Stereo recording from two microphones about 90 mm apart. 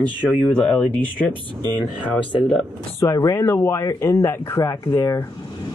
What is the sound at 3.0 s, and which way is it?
Speech, 35° left (ahead or behind).